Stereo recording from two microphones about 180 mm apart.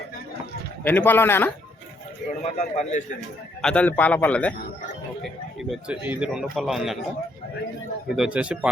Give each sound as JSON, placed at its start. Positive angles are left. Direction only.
{"t": 0.9, "sound": "a man's voice", "side_deg": 10}
{"t": 2.4, "sound": "a man's voice", "side_deg": 40}
{"t": 3.6, "sound": "a man's voice", "side_deg": 5}
{"t": 8.1, "sound": "speech", "side_deg": -5}